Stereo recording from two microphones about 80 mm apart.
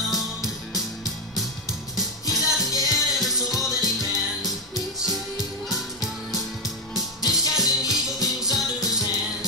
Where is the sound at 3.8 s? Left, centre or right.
Left.